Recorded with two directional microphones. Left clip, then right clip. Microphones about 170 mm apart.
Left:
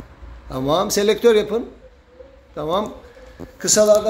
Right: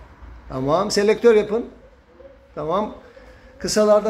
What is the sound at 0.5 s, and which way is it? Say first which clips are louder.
A man's voice: left 1 dB; centre (ahead or behind).